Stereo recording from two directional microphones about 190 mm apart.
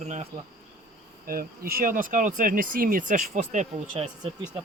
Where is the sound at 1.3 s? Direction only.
50° right (ahead or behind).